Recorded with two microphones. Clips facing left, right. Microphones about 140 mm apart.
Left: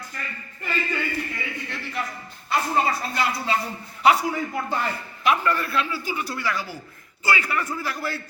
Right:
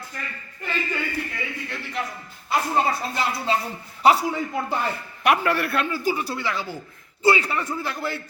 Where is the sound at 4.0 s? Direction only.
35° right (ahead or behind).